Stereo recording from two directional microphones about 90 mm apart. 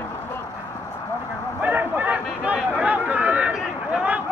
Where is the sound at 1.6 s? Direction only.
20° right (ahead or behind).